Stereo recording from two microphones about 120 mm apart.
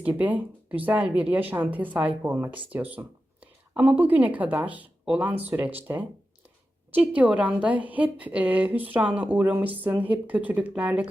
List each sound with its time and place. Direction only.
0.0 s speech: 15° right (ahead or behind)